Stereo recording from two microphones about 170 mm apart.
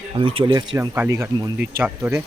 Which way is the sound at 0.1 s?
35° right (ahead or behind).